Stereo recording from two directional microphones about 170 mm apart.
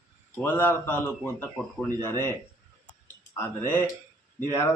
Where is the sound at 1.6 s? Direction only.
Centre (ahead or behind).